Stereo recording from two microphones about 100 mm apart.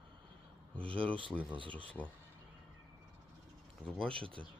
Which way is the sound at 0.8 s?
65° right (ahead or behind).